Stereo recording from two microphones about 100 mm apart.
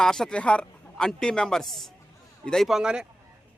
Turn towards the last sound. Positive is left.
turn(degrees=-10)  # may be behind; listen again after turning